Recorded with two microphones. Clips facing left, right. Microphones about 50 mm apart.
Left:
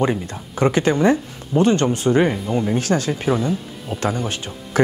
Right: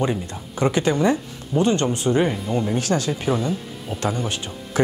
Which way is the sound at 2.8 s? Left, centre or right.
Left.